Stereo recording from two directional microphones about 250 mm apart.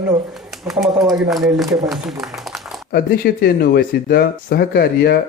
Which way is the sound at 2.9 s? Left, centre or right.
Left.